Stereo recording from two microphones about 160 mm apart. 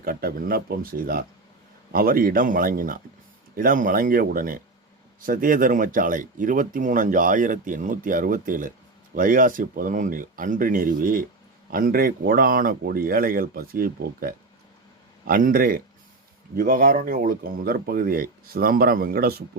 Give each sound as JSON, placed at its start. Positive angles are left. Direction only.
{"t": 0.0, "sound": "speech", "side_deg": -65}